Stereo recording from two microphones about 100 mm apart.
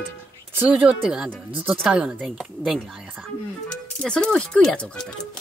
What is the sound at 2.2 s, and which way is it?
Speech, centre (ahead or behind).